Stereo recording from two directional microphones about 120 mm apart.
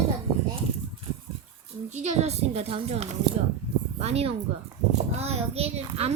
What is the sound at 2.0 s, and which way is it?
A child's voice, 70° right (ahead or behind).